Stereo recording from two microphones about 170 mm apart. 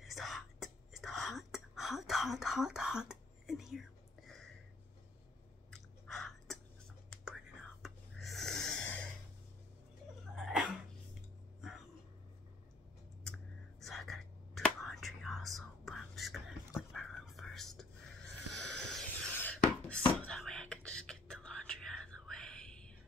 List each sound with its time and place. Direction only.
0.0 s whispering: centre (ahead or behind)
5.7 s chewing: 5° left (ahead or behind)
7.2 s whispering: 5° right (ahead or behind)
10.3 s cough: 5° right (ahead or behind)
13.2 s whispering: centre (ahead or behind)
18.5 s a sound: 5° left (ahead or behind)